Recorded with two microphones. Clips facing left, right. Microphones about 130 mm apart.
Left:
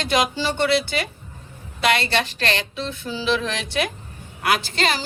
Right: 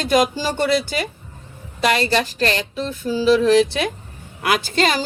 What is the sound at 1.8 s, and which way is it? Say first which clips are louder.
Music: right 3 dB; 40° right (ahead or behind).